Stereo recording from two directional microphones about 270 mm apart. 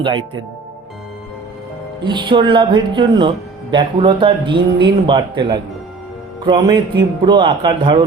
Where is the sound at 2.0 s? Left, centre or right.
Centre.